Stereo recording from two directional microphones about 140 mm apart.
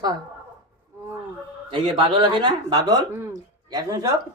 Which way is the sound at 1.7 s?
35° right (ahead or behind).